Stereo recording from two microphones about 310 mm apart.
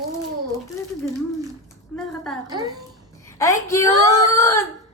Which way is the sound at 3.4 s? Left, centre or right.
Centre.